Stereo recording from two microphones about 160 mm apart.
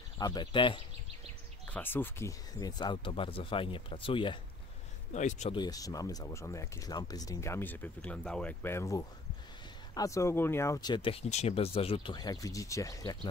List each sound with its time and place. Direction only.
0.2 s speech: 30° left (ahead or behind)
1.7 s speech: 10° left (ahead or behind); by 4.4 s 30° left (ahead or behind)
5.1 s speech: 50° left (ahead or behind)
5.5 s speech: 25° left (ahead or behind)